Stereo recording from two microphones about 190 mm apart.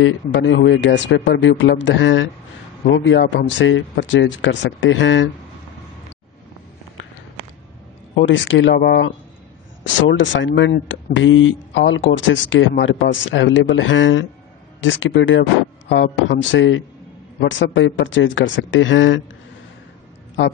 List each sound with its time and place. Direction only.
0.0 s speech: 80° left
8.2 s speech: 75° left (ahead or behind)
9.8 s speech: 80° left
15.9 s speech: 75° left (ahead or behind)